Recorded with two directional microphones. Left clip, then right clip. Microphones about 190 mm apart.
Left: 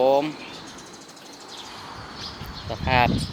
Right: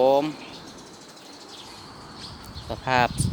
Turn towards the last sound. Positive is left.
turn(degrees=-20)  # may be behind; listen again after turning